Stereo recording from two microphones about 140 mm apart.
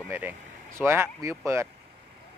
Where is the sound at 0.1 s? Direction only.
15° right (ahead or behind).